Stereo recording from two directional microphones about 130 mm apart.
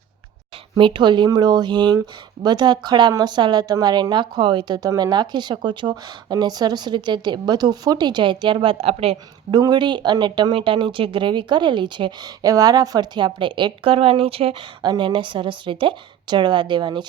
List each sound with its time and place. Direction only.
0.8 s a woman's voice: 40° right (ahead or behind)
9.5 s a woman's voice: 30° right (ahead or behind); by 14.8 s 45° right (ahead or behind)
14.8 s a woman's voice: 35° right (ahead or behind)